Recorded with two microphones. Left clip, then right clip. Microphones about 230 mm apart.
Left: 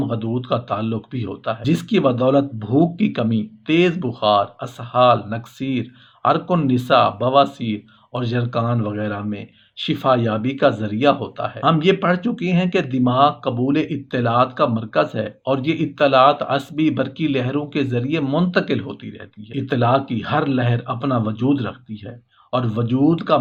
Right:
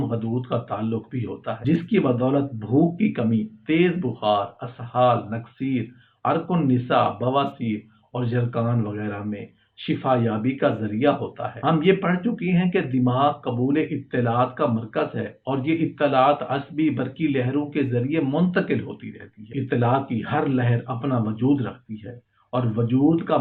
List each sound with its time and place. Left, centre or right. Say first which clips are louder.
0.1 s speech: left 4 dB; left